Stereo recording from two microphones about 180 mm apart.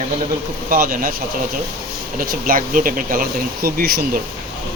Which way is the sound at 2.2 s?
50° right (ahead or behind).